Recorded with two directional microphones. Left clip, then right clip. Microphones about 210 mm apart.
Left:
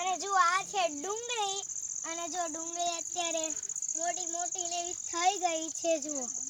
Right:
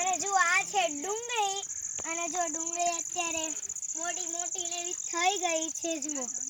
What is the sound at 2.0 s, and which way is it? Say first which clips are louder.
Cricket: right 4 dB; 10° left (ahead or behind).